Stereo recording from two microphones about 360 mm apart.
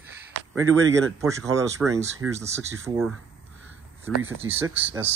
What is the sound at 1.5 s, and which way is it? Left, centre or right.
Speech, centre.